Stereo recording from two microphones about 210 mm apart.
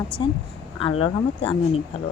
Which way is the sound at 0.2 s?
20° left (ahead or behind).